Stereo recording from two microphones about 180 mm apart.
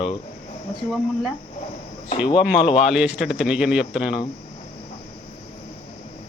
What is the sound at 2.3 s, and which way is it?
Speech, 5° right (ahead or behind).